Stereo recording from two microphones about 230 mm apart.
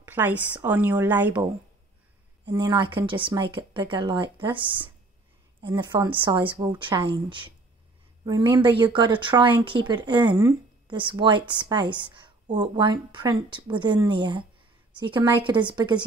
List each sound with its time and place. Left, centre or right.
0.0 s a woman's voice: centre
2.4 s a woman's voice: centre